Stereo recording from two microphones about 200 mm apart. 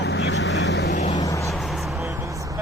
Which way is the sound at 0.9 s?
35° left (ahead or behind).